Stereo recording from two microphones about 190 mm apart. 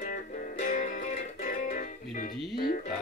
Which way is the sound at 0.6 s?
40° left (ahead or behind).